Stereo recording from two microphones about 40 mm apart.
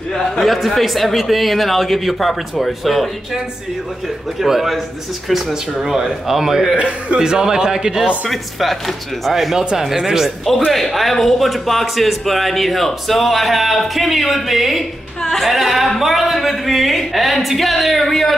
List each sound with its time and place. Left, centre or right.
0.4 s speech: centre
4.4 s a man's voice: centre
8.3 s a man's voice: centre
10.7 s speech: centre